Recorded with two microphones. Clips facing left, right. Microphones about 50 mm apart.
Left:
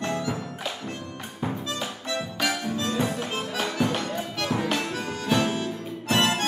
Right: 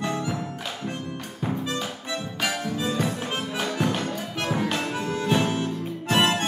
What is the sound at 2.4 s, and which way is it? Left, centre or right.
Music, centre.